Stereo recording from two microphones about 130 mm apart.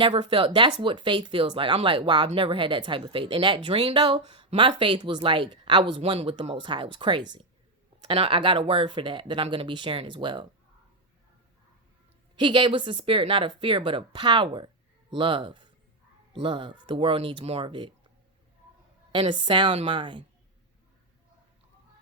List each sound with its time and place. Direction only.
0.0 s speech: 40° right (ahead or behind)
6.0 s speech: 45° right (ahead or behind)
12.4 s speech: 35° right (ahead or behind)
19.1 s speech: 40° right (ahead or behind)